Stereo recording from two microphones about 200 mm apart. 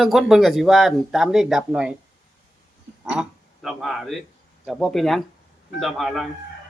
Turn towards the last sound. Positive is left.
turn(degrees=0)  # may be behind; listen again after turning